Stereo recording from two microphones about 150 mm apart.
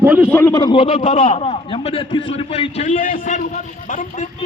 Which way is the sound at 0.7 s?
35° left (ahead or behind).